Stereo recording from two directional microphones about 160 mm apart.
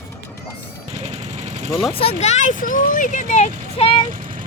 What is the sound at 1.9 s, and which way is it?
Speech, 35° left (ahead or behind).